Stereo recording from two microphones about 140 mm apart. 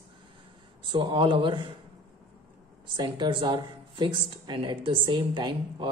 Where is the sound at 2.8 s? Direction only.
35° right (ahead or behind).